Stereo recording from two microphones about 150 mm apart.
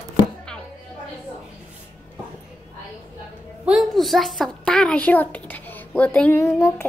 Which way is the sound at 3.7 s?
Centre (ahead or behind).